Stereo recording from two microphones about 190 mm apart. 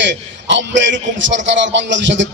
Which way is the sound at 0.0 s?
70° right (ahead or behind).